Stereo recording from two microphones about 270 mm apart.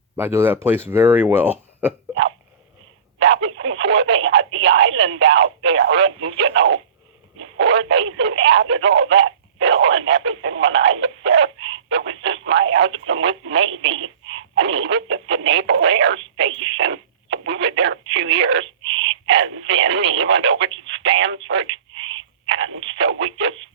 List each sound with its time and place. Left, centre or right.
0.2 s speech: centre
3.2 s speech: right
19.7 s speech: right